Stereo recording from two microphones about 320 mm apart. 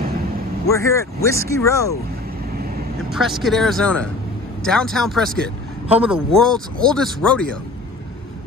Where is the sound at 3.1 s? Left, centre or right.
Centre.